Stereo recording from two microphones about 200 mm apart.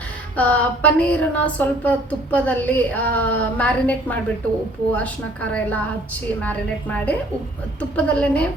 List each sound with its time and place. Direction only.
0.3 s speech: 5° left (ahead or behind)